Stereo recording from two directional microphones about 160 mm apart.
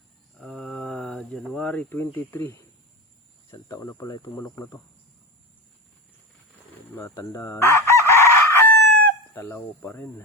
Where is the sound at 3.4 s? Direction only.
20° left (ahead or behind).